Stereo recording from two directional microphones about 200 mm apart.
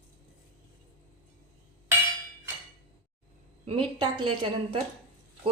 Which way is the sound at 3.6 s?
25° right (ahead or behind).